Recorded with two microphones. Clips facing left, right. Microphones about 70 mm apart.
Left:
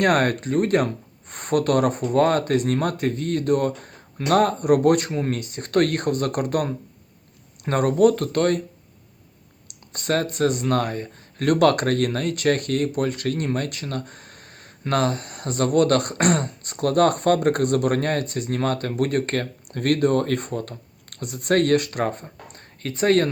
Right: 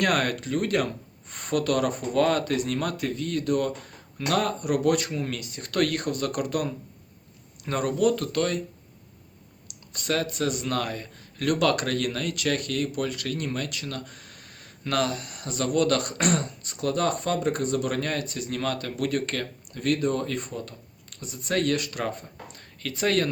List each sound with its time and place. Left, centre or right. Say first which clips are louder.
0.0 s speech: left 5 dB; left
9.6 s speech: left 4 dB; left